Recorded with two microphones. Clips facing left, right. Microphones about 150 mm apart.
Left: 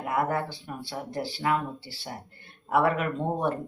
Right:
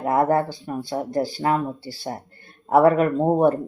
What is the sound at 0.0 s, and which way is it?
Speech, 40° right (ahead or behind).